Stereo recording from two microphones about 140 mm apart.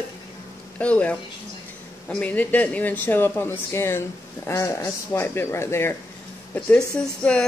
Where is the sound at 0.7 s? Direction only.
10° left (ahead or behind).